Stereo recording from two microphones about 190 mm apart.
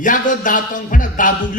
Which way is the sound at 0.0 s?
45° left (ahead or behind).